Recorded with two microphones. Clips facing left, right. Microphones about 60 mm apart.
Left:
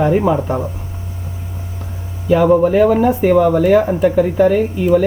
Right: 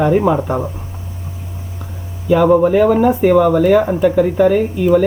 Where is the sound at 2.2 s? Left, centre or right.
Centre.